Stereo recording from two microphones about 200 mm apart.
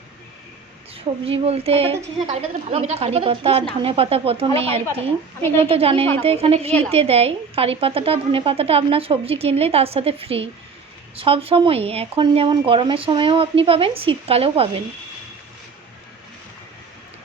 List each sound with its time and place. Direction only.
1.2 s a woman's voice: 30° right (ahead or behind)